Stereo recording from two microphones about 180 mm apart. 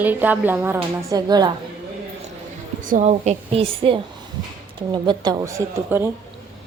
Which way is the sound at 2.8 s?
40° right (ahead or behind).